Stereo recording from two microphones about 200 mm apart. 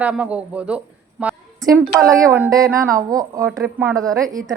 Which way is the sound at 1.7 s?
15° right (ahead or behind).